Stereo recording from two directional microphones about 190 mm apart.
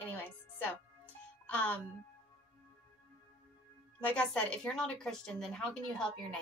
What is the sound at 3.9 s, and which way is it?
A woman's voice, 5° left (ahead or behind).